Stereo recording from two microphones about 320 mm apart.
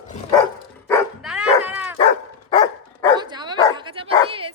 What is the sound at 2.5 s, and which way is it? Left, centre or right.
Dog, centre.